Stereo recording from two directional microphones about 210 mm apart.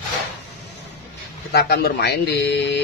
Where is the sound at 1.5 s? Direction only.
50° left (ahead or behind).